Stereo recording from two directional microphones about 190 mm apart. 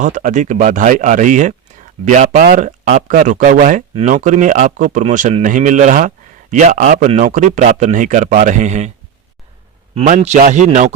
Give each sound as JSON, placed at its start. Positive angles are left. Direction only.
{"t": 0.0, "sound": "speech", "side_deg": -40}
{"t": 10.0, "sound": "speech", "side_deg": -40}